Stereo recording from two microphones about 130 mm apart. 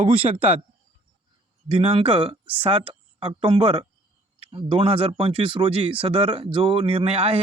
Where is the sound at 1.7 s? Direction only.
45° right (ahead or behind).